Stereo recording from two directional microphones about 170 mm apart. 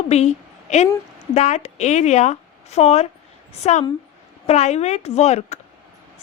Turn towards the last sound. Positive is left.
turn(degrees=40)  # may be behind; listen again after turning